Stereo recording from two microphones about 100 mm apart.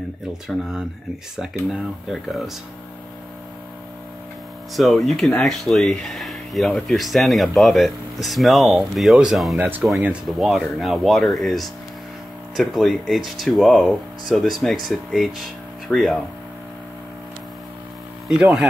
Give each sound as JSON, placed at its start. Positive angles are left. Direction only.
{"t": 0.5, "sound": "speech", "side_deg": -5}
{"t": 4.7, "sound": "speech", "side_deg": 0}
{"t": 9.6, "sound": "speech", "side_deg": -15}
{"t": 10.4, "sound": "speech", "side_deg": 0}
{"t": 18.3, "sound": "speech", "side_deg": -5}